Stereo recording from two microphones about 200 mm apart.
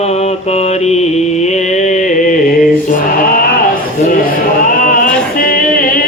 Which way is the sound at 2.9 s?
45° left (ahead or behind).